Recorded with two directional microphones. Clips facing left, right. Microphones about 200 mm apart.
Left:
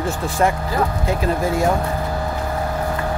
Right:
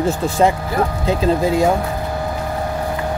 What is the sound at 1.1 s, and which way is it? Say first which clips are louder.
Speech: right 6 dB; 20° right (ahead or behind).